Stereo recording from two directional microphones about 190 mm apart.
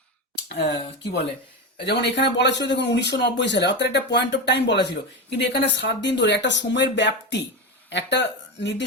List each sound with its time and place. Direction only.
0.4 s speech: 60° left (ahead or behind)
1.8 s speech: 60° left (ahead or behind)